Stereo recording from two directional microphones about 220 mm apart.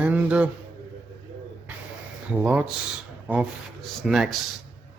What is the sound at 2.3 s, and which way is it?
Speech, 5° right (ahead or behind).